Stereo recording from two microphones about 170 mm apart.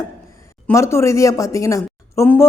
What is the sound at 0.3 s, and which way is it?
A woman's voice, 15° left (ahead or behind).